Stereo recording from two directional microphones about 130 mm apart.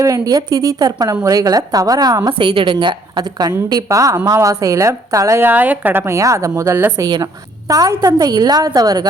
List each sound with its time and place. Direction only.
0.0 s a woman's voice: 25° right (ahead or behind)